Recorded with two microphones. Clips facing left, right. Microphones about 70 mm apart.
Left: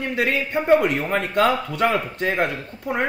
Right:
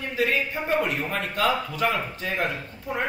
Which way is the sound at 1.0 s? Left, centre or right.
Left.